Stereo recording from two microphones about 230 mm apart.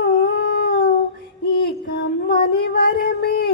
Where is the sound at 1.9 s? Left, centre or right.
Left.